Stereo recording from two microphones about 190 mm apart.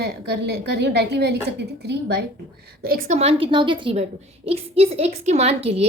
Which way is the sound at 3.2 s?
30° right (ahead or behind).